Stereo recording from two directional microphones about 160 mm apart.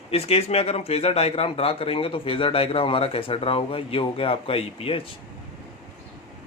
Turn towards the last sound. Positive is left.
turn(degrees=35)  # may be behind; listen again after turning